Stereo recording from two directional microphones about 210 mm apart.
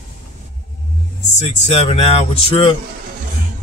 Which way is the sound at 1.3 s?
30° left (ahead or behind).